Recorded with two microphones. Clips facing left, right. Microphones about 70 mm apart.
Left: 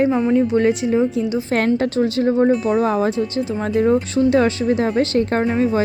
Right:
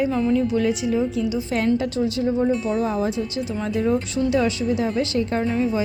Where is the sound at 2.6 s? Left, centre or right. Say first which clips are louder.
Left 5 dB; left.